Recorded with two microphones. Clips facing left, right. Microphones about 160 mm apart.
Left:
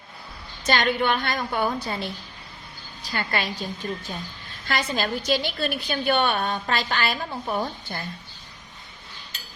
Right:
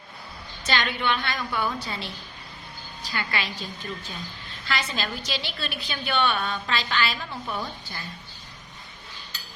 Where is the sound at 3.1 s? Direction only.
45° left (ahead or behind).